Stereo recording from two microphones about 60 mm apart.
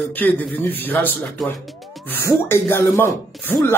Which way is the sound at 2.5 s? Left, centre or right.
Left.